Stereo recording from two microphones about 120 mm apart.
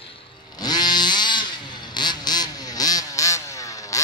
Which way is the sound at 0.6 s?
35° left (ahead or behind).